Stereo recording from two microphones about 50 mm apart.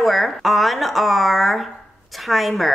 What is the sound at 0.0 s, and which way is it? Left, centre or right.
A woman's voice, centre.